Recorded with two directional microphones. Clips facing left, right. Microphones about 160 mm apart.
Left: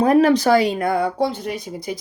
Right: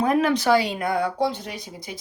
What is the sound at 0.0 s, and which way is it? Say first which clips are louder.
Speech: left 6 dB; 35° left (ahead or behind).